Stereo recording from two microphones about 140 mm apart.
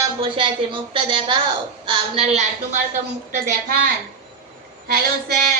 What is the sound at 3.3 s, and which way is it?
Speech, 70° right (ahead or behind).